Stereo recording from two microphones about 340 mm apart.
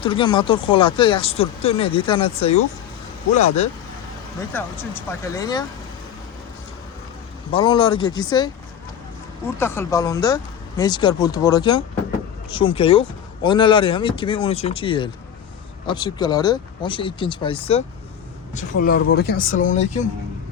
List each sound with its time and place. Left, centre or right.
0.0 s speech: centre
4.5 s speech: centre
7.5 s speech: centre
9.6 s speech: centre